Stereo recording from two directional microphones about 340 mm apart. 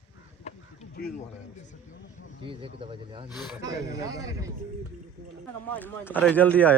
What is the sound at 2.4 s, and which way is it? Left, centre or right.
Speech, centre.